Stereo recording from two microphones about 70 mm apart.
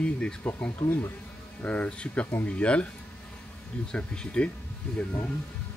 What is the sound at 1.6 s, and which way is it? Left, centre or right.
Speech, left.